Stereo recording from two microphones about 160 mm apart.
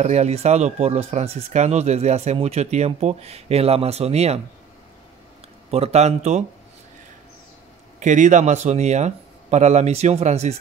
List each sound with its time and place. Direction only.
0.0 s speech: 45° right (ahead or behind)
5.7 s speech: 40° right (ahead or behind)
8.0 s speech: 50° right (ahead or behind)